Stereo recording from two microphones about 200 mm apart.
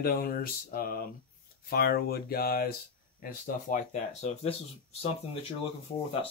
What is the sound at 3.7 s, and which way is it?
Speech, 35° left (ahead or behind).